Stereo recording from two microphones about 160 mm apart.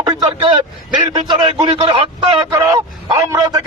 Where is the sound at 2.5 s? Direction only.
20° right (ahead or behind).